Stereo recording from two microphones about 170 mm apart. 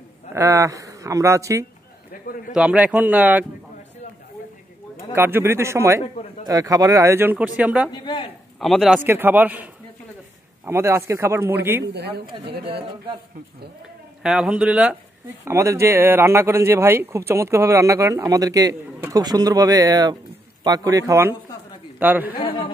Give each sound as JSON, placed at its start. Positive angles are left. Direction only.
{"t": 0.3, "sound": "a man's voice", "side_deg": -15}
{"t": 2.5, "sound": "a man's voice", "side_deg": -5}
{"t": 5.1, "sound": "a man's voice", "side_deg": -15}
{"t": 7.9, "sound": "speech", "side_deg": 25}
{"t": 8.5, "sound": "a man's voice", "side_deg": 0}
{"t": 9.0, "sound": "a man's voice", "side_deg": -10}
{"t": 11.8, "sound": "speech", "side_deg": -75}
{"t": 14.2, "sound": "a man's voice", "side_deg": -5}
{"t": 15.4, "sound": "a man's voice", "side_deg": -15}
{"t": 22.4, "sound": "a man's voice", "side_deg": 30}